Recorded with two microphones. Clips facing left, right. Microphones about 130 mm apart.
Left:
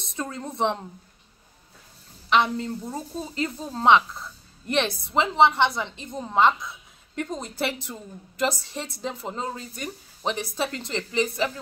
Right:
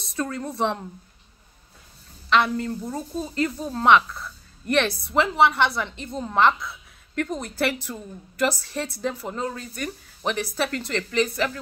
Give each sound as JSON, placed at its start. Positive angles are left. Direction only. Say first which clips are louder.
{"t": 0.0, "sound": "a woman's voice", "louder": "right 4 dB", "side_deg": 20}
{"t": 2.2, "sound": "a woman's voice", "louder": "right 1 dB", "side_deg": 20}